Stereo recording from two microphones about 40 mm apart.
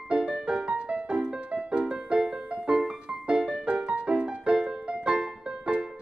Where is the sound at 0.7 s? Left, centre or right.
Right.